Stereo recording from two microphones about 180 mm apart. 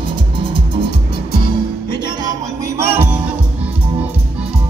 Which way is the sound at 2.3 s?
15° right (ahead or behind).